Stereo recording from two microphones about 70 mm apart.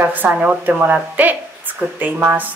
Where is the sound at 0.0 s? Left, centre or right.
Right.